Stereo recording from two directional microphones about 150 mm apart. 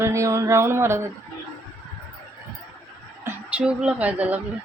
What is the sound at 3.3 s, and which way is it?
Speech, 10° right (ahead or behind).